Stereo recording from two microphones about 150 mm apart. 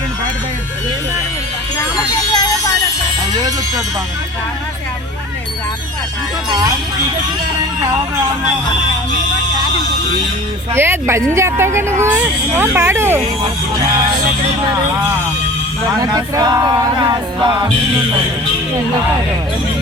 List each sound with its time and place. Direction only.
2.3 s music: 25° left (ahead or behind)
6.5 s speech: 25° right (ahead or behind)
10.8 s speech: 15° right (ahead or behind)
16.0 s speech: 25° right (ahead or behind)